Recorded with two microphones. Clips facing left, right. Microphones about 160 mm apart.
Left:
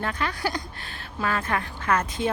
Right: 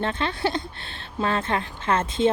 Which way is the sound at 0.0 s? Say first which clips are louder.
Right 3 dB; 25° right (ahead or behind).